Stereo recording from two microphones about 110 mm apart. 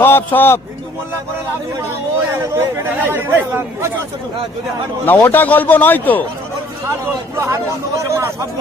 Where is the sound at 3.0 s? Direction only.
20° right (ahead or behind).